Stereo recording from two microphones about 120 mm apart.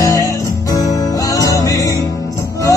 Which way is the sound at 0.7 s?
30° left (ahead or behind).